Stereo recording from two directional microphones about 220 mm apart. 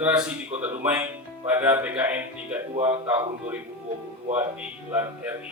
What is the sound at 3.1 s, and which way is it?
Speech, 10° right (ahead or behind).